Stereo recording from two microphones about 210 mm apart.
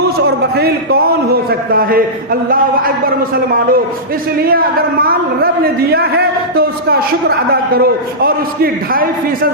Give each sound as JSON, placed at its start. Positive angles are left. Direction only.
{"t": 0.5, "sound": "a man's voice", "side_deg": -50}